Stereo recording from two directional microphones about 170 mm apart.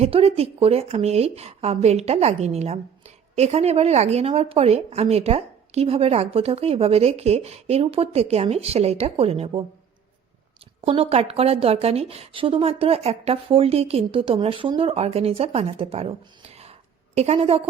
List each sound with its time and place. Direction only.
0.0 s speech: 35° right (ahead or behind)
10.8 s speech: 35° right (ahead or behind)
17.2 s speech: 35° right (ahead or behind)